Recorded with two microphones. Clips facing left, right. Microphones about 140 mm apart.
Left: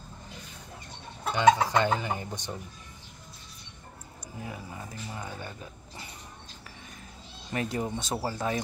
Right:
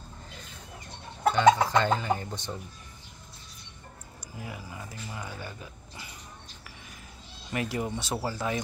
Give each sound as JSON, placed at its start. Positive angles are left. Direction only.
{"t": 1.3, "sound": "speech", "side_deg": 15}
{"t": 4.4, "sound": "speech", "side_deg": 25}
{"t": 7.5, "sound": "speech", "side_deg": 30}